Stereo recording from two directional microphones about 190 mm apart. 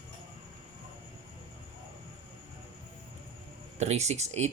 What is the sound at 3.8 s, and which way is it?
Speech, 35° right (ahead or behind).